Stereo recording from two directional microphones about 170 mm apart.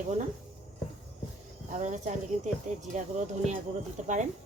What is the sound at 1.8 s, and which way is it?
Speech, 45° right (ahead or behind).